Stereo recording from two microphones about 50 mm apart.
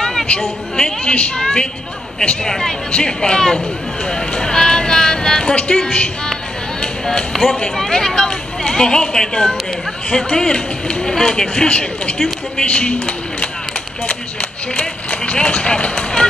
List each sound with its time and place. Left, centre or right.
0.0 s a sound: centre
1.0 s speech: left
6.8 s a sound: centre
7.7 s speech: centre; by 13.5 s left
14.8 s speech: left
16.0 s run: centre